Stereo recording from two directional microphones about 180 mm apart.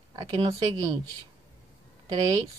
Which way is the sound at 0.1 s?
25° right (ahead or behind).